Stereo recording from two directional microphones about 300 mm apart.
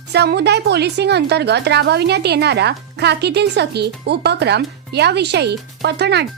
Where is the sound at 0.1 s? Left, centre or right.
Right.